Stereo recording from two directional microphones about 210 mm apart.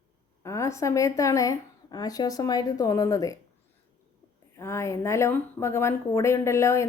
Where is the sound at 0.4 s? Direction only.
15° left (ahead or behind).